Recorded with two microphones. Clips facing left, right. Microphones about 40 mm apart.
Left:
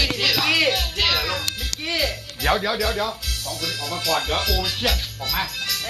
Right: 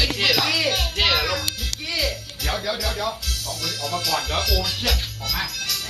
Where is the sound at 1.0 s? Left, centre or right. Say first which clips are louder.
Right 2 dB; centre.